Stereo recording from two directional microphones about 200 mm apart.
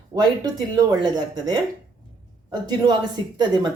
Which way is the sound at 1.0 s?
20° right (ahead or behind).